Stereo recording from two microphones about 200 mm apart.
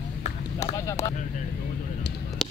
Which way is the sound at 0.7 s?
15° left (ahead or behind).